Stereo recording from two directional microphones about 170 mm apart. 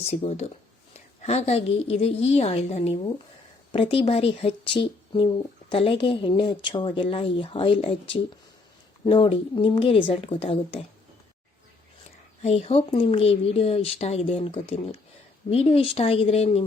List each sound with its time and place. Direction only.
0.2 s speech: 40° left (ahead or behind)
9.0 s speech: 30° left (ahead or behind)
12.4 s speech: 40° left (ahead or behind)